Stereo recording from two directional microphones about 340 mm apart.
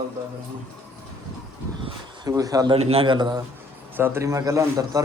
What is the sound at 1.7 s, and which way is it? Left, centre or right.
Speech, centre.